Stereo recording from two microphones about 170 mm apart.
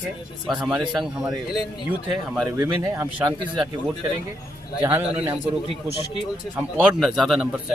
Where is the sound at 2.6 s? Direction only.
20° right (ahead or behind).